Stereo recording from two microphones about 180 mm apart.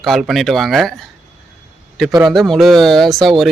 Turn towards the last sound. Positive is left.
turn(degrees=0)  # may be behind; listen again after turning